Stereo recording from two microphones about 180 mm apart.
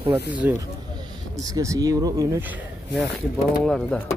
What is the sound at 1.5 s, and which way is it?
Speech, 20° right (ahead or behind).